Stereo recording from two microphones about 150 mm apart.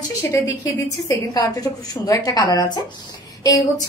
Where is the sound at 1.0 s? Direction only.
25° left (ahead or behind).